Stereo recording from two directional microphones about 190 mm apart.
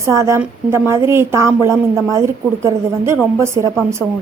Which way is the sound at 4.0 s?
Centre (ahead or behind).